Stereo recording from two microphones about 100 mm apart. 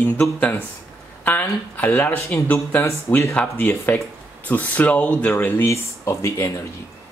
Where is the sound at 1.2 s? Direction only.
20° left (ahead or behind).